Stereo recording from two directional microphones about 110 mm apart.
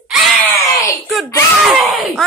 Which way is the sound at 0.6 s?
30° left (ahead or behind).